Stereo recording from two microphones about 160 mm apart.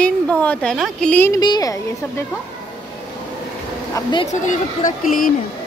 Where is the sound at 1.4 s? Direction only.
25° left (ahead or behind).